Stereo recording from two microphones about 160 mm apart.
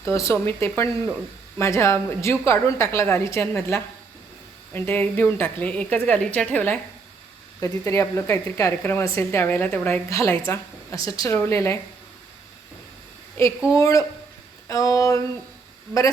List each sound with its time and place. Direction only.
0.0 s a woman's voice: 15° left (ahead or behind)
7.6 s a woman's voice: 20° left (ahead or behind)
10.1 s a woman's voice: 20° left (ahead or behind)
13.7 s a woman's voice: 20° left (ahead or behind)